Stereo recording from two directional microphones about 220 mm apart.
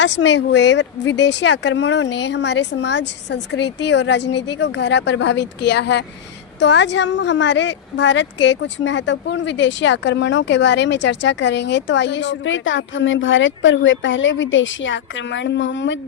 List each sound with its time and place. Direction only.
0.0 s a woman's voice: 55° left (ahead or behind)